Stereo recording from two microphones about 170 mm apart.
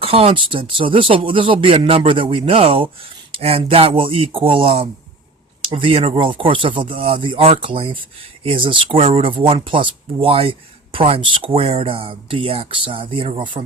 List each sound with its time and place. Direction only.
0.0 s speech: 35° right (ahead or behind)